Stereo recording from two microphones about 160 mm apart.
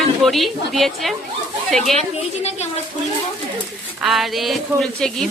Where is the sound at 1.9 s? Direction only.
45° left (ahead or behind).